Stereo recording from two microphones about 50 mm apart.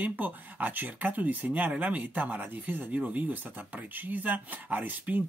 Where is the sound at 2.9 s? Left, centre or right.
Right.